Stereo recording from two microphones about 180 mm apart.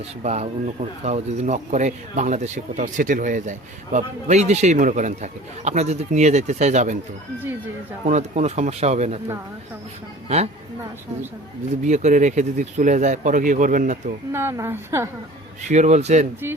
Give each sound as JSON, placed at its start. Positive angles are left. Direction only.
{"t": 0.2, "sound": "speech", "side_deg": -35}
{"t": 8.0, "sound": "speech", "side_deg": -40}
{"t": 10.2, "sound": "speech", "side_deg": -35}
{"t": 11.7, "sound": "speech", "side_deg": -40}
{"t": 14.3, "sound": "a woman's voice", "side_deg": -15}
{"t": 15.7, "sound": "speech", "side_deg": -40}